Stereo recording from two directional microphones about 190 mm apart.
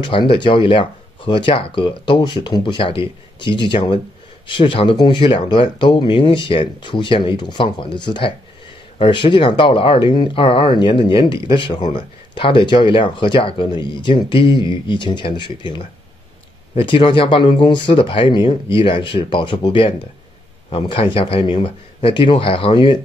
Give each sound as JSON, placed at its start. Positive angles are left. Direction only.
{"t": 0.0, "sound": "speech", "side_deg": 25}